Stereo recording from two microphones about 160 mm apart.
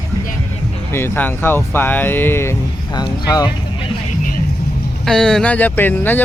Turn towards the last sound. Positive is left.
turn(degrees=10)  # may be behind; listen again after turning